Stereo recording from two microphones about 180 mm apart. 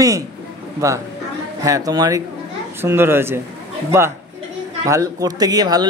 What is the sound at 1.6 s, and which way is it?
A woman's voice, 20° right (ahead or behind).